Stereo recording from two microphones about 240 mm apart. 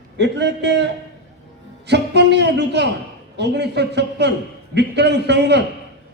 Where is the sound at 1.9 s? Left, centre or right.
Right.